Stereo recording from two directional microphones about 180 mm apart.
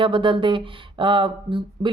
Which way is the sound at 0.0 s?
25° right (ahead or behind).